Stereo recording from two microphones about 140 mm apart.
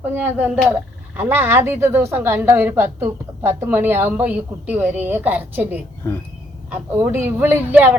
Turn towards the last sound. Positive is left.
turn(degrees=-10)  # may be behind; listen again after turning